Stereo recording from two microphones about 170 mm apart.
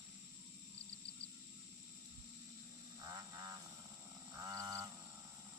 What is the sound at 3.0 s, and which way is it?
Frog, 25° right (ahead or behind).